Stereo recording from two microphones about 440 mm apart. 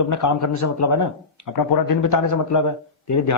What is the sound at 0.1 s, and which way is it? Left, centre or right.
A man's voice, left.